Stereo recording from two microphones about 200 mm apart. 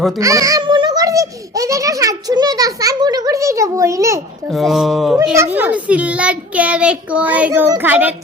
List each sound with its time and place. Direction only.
0.2 s a child's voice: 15° right (ahead or behind)
4.5 s speech: centre (ahead or behind)
5.4 s a child's voice: 10° right (ahead or behind)